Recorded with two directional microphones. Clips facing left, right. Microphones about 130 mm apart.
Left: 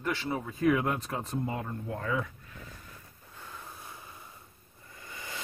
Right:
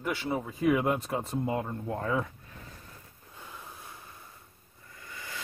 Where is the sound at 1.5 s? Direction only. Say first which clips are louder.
Right 4 dB; 30° right (ahead or behind).